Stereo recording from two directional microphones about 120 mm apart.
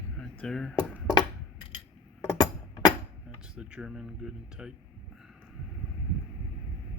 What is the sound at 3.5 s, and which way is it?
Speech, 5° right (ahead or behind).